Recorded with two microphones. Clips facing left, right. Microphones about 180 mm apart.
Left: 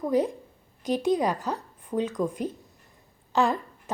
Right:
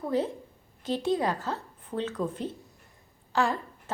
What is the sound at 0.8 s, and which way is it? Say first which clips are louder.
A woman's voice: left 3 dB; 15° left (ahead or behind).